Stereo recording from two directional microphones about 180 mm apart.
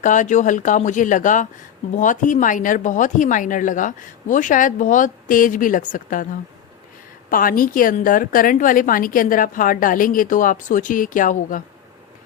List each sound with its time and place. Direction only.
0.0 s a woman's voice: 45° left (ahead or behind)
7.3 s a woman's voice: 50° left (ahead or behind)